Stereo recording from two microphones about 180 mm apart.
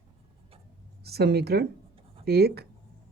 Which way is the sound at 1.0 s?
60° right (ahead or behind).